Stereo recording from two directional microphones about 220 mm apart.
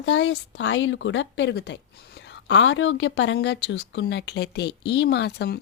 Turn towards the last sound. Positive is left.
turn(degrees=50)  # may be behind; listen again after turning